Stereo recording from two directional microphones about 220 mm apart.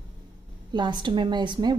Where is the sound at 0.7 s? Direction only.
20° right (ahead or behind).